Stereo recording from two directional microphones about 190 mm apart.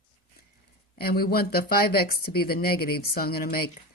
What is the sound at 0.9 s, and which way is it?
Speech, 55° left (ahead or behind).